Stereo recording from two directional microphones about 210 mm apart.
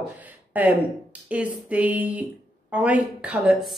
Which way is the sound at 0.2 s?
10° right (ahead or behind).